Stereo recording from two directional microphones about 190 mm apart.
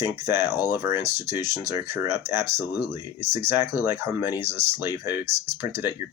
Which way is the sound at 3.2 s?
35° right (ahead or behind).